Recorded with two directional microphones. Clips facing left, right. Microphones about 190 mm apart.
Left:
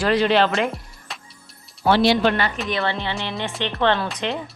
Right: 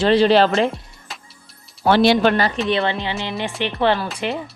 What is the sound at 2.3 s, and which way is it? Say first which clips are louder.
Speech: right 4 dB; 35° right (ahead or behind).